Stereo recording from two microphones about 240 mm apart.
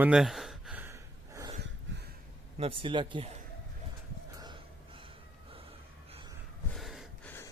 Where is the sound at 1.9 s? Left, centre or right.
Right.